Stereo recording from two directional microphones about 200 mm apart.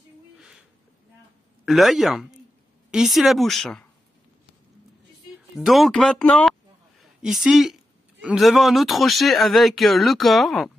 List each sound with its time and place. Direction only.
0.4 s a sound: 5° right (ahead or behind)
1.7 s speech: centre (ahead or behind)
5.7 s speech: centre (ahead or behind)